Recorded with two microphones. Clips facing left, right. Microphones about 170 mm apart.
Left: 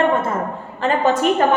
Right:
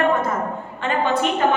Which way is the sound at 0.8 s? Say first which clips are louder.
Left 3 dB; 40° left (ahead or behind).